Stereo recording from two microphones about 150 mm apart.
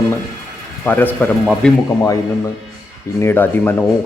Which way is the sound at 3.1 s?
15° left (ahead or behind).